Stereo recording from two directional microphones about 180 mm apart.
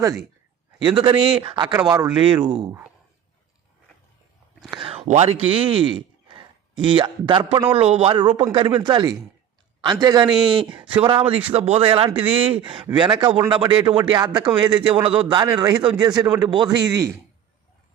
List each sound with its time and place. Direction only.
0.9 s speech: 25° right (ahead or behind)
4.7 s a sound: 30° right (ahead or behind)
5.0 s speech: 35° right (ahead or behind); by 17.2 s 20° right (ahead or behind)